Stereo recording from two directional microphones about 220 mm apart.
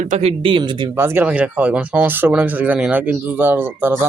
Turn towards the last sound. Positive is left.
turn(degrees=-10)  # may be behind; listen again after turning